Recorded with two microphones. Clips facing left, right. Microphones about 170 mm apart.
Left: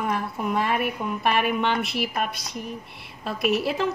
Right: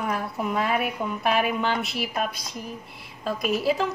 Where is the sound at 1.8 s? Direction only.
60° left (ahead or behind).